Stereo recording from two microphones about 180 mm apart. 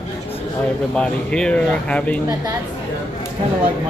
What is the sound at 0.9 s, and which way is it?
Speech, 5° left (ahead or behind).